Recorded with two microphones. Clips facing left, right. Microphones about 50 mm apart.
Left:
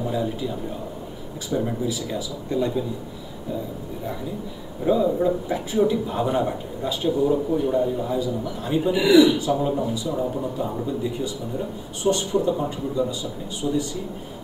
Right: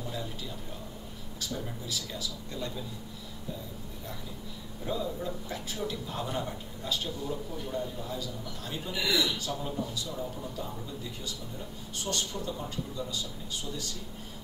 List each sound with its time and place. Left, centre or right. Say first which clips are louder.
0.0 s a man's voice: left 13 dB; centre
1.5 s speech: left 14 dB; left
1.9 s a man's voice: left 10 dB; centre
4.8 s a man's voice: left 14 dB; centre
10.9 s a man's voice: left 13 dB; centre